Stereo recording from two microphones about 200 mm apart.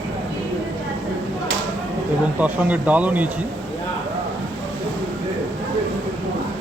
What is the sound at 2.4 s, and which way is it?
Speech, 5° right (ahead or behind).